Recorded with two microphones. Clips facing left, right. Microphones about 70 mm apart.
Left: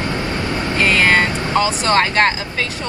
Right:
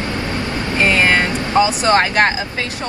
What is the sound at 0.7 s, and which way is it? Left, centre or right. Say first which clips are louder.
Vehicle: even; right.